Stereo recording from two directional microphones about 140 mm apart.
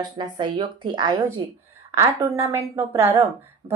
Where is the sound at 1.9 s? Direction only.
20° right (ahead or behind).